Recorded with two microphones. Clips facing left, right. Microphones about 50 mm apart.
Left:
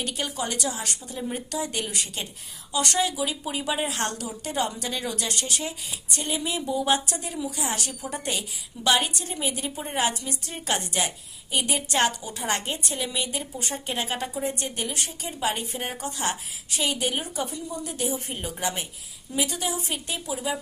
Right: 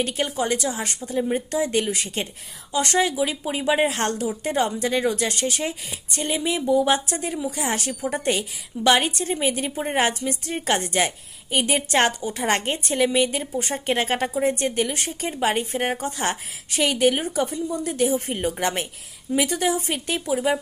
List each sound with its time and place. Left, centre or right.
0.0 s a woman's voice: right